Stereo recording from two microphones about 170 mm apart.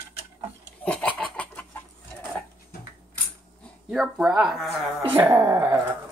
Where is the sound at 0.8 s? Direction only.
10° left (ahead or behind).